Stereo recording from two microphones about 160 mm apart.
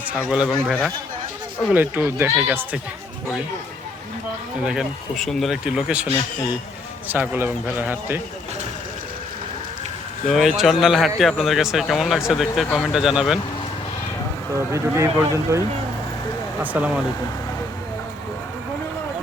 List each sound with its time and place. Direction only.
0.3 s speech: 5° right (ahead or behind)
1.7 s a man's voice: 10° right (ahead or behind)
4.6 s speech: 5° right (ahead or behind)
7.1 s a man's voice: 10° right (ahead or behind)
10.2 s speech: centre (ahead or behind)
14.5 s a man's voice: 15° right (ahead or behind)